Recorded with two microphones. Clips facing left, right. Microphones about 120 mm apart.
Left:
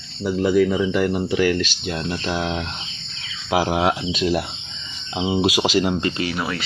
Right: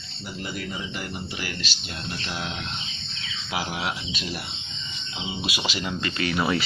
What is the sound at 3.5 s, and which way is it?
Speech, 90° left.